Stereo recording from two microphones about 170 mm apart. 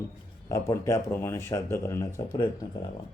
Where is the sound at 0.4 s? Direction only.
15° left (ahead or behind).